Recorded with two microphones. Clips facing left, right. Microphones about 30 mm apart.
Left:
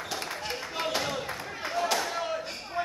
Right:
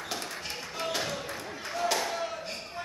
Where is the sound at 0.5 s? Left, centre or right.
Centre.